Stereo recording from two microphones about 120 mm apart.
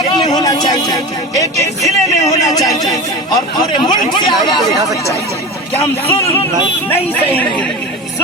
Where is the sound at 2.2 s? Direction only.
70° left (ahead or behind).